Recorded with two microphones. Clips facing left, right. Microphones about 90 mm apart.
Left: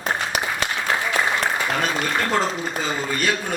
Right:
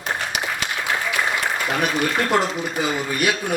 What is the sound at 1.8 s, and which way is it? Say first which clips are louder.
A man's voice: right 2 dB; 15° right (ahead or behind).